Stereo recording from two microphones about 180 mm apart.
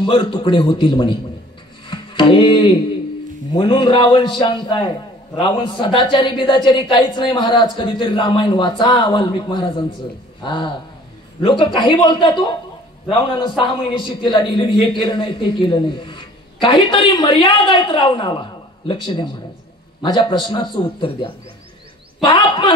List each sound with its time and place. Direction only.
0.0 s a man's voice: 25° left (ahead or behind)
1.9 s music: 25° left (ahead or behind)
3.5 s a man's voice: 25° left (ahead or behind)